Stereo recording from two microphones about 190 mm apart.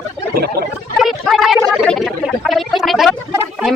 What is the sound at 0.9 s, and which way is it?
Gargling, centre (ahead or behind).